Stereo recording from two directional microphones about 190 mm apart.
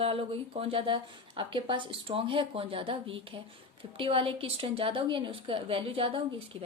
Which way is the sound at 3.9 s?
30° right (ahead or behind).